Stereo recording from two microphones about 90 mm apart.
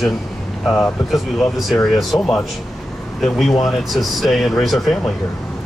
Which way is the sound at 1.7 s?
Centre (ahead or behind).